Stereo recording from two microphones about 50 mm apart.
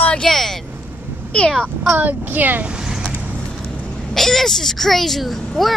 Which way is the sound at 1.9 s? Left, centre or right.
Right.